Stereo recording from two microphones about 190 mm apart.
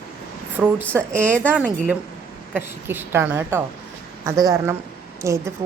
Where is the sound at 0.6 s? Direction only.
5° right (ahead or behind).